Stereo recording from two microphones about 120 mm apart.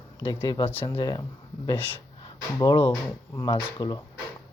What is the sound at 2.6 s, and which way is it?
Speech, 40° left (ahead or behind).